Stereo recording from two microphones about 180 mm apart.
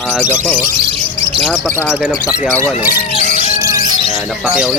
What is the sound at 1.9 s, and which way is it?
Speech, 10° right (ahead or behind).